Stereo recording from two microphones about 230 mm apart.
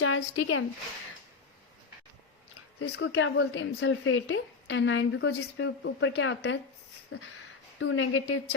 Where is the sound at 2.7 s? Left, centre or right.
Left.